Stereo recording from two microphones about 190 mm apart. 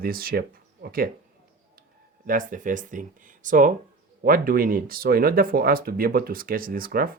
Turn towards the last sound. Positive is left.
turn(degrees=-50)  # may be behind; listen again after turning